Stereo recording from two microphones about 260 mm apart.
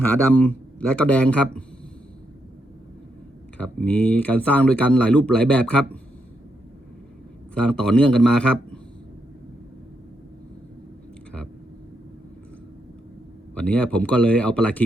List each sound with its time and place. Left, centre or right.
0.0 s speech: centre
3.6 s speech: centre
7.5 s speech: centre
13.5 s speech: centre